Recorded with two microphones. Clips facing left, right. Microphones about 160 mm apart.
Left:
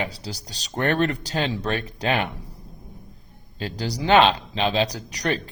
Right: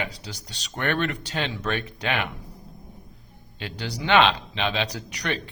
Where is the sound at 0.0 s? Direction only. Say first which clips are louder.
Left 3 dB; 35° left (ahead or behind).